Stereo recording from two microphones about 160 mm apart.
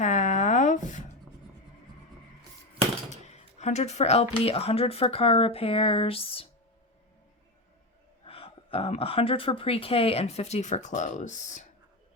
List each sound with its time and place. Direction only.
0.0 s a sound: 50° left (ahead or behind)
3.1 s speech: 45° left (ahead or behind)
8.2 s speech: 35° left (ahead or behind)